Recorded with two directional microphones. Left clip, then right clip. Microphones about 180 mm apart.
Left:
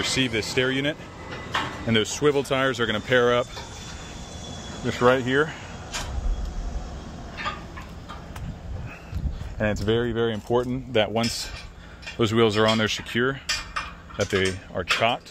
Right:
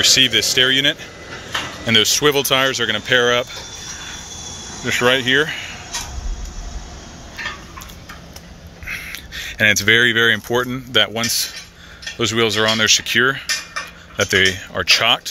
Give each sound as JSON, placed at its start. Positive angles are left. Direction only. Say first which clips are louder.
{"t": 0.0, "sound": "speech", "louder": "right 11 dB", "side_deg": 5}
{"t": 2.7, "sound": "speech", "louder": "right 5 dB", "side_deg": 15}
{"t": 4.8, "sound": "speech", "louder": "right 5 dB", "side_deg": 0}
{"t": 9.6, "sound": "speech", "louder": "right 11 dB", "side_deg": -10}